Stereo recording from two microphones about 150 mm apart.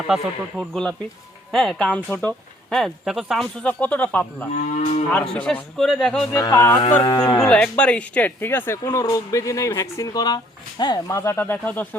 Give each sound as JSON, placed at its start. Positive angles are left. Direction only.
{"t": 0.1, "sound": "a man's voice", "side_deg": 0}
{"t": 4.8, "sound": "moo", "side_deg": 50}
{"t": 5.1, "sound": "a man's voice", "side_deg": 5}
{"t": 6.3, "sound": "speech", "side_deg": 20}
{"t": 7.4, "sound": "speech", "side_deg": 10}